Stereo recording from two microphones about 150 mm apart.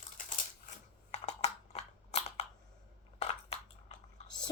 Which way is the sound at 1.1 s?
45° left (ahead or behind).